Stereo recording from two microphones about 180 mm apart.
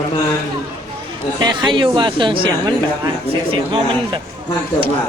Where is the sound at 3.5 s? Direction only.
30° right (ahead or behind).